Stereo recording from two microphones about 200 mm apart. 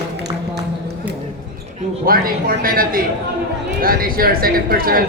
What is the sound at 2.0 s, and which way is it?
Speech, 45° right (ahead or behind).